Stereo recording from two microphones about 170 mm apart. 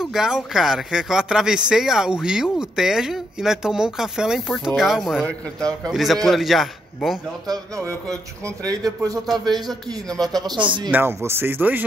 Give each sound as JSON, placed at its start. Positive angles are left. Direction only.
{"t": 0.0, "sound": "speech", "side_deg": -5}
{"t": 7.4, "sound": "speech", "side_deg": -20}
{"t": 9.7, "sound": "speech", "side_deg": 5}
{"t": 10.3, "sound": "speech", "side_deg": -25}
{"t": 10.9, "sound": "speech", "side_deg": -15}